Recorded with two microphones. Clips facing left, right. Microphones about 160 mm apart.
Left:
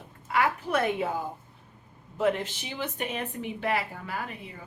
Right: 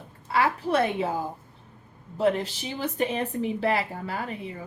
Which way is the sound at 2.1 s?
35° right (ahead or behind).